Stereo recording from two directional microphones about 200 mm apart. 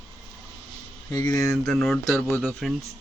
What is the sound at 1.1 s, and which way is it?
Speech, 15° left (ahead or behind).